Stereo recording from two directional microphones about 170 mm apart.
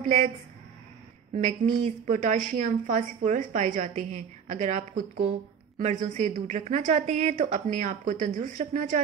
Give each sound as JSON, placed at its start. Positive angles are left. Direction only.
{"t": 0.0, "sound": "a woman's voice", "side_deg": -45}
{"t": 1.3, "sound": "a woman's voice", "side_deg": -45}